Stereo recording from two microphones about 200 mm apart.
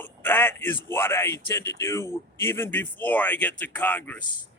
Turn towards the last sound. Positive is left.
turn(degrees=10)  # may be behind; listen again after turning